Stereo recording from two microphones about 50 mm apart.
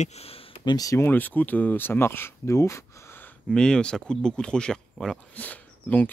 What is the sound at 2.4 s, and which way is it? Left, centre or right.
Speech, left.